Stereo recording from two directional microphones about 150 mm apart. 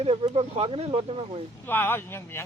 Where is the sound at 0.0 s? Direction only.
40° right (ahead or behind).